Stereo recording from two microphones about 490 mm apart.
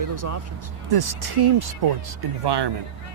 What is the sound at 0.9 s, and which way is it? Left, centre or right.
Speech, right.